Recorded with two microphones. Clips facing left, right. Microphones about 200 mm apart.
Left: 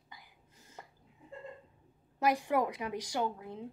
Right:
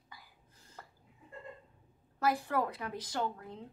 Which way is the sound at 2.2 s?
15° left (ahead or behind).